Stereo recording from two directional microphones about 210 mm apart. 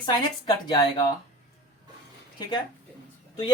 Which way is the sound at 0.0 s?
20° left (ahead or behind).